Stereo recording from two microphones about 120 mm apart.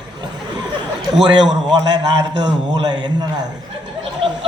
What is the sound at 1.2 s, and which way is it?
A man's voice, 35° right (ahead or behind).